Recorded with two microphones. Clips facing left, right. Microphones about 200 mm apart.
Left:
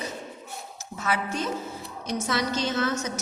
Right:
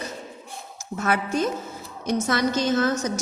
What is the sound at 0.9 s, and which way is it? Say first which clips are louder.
A woman's voice: right 5 dB; 50° right (ahead or behind).